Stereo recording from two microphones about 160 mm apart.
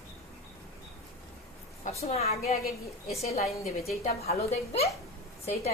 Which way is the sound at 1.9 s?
40° left (ahead or behind).